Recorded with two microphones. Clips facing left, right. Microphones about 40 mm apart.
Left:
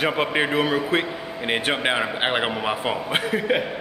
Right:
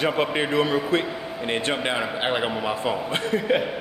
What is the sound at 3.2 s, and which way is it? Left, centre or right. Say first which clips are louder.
Speech: right 2 dB; centre.